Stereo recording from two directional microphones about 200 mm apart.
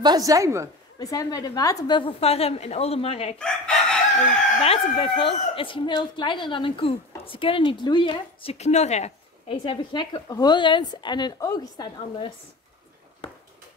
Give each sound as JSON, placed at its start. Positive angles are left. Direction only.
{"t": 0.0, "sound": "a woman's voice", "side_deg": -20}
{"t": 0.9, "sound": "speech", "side_deg": 20}
{"t": 3.3, "sound": "chicken", "side_deg": 5}
{"t": 4.6, "sound": "speech", "side_deg": 30}
{"t": 13.2, "sound": "a sound", "side_deg": 25}